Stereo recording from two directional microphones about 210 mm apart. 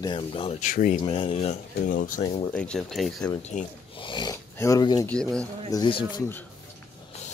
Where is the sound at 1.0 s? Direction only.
25° left (ahead or behind).